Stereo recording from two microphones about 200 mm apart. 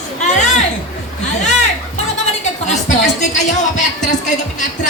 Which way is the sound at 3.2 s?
35° left (ahead or behind).